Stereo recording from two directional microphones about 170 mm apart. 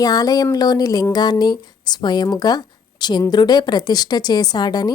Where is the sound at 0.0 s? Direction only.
20° left (ahead or behind).